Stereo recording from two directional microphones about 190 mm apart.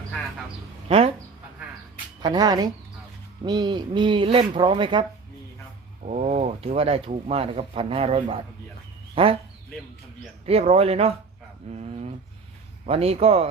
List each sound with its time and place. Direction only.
0.9 s a sound: 30° right (ahead or behind)
2.2 s speech: 20° right (ahead or behind)
6.1 s speech: 35° right (ahead or behind)
10.4 s speech: 35° right (ahead or behind)
11.7 s a sound: 35° right (ahead or behind)
12.8 s speech: 30° right (ahead or behind)